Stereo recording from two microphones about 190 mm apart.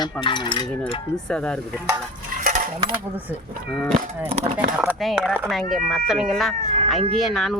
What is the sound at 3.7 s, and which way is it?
Speech, 5° left (ahead or behind).